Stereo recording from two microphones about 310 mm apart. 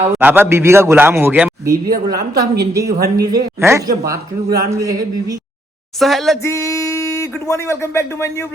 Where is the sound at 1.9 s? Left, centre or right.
Right.